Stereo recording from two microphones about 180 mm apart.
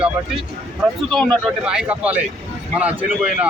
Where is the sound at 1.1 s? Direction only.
Centre (ahead or behind).